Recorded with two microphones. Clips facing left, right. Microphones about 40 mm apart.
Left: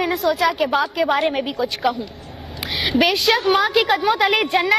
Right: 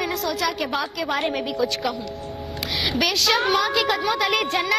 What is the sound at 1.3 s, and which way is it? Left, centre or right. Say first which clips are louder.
Speech: left 1 dB; centre.